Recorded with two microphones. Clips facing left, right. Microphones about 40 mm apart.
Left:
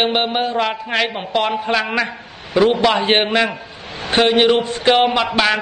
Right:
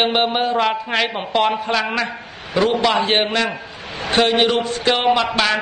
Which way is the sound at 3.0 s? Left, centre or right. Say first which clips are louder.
Left 2 dB; left.